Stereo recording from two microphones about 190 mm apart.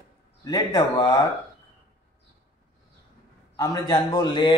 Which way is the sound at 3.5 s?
20° left (ahead or behind).